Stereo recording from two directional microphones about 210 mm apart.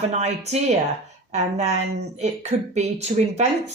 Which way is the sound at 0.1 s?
30° right (ahead or behind).